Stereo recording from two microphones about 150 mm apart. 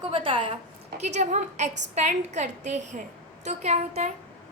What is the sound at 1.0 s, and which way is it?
A woman's voice, 50° right (ahead or behind).